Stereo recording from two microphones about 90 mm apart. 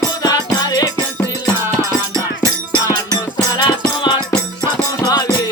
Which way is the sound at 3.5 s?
50° left (ahead or behind).